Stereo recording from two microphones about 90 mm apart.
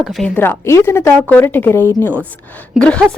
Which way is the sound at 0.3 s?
30° left (ahead or behind).